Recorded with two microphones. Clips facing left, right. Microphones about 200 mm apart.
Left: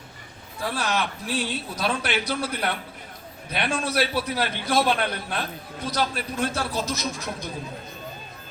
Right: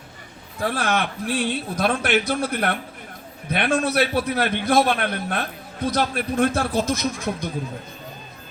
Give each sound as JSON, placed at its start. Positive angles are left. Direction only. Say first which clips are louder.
{"t": 0.6, "sound": "a man's voice", "louder": "right 4 dB", "side_deg": -55}